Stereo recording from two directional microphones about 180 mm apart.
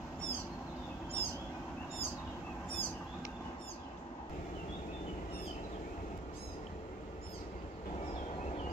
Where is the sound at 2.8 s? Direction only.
10° left (ahead or behind).